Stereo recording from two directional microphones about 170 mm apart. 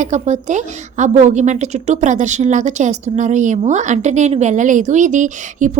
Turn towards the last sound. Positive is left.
turn(degrees=-45)  # may be behind; listen again after turning